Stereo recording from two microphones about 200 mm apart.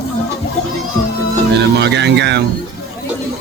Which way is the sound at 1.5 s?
60° right (ahead or behind).